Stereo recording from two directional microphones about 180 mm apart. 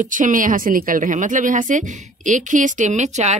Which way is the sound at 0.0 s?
45° right (ahead or behind).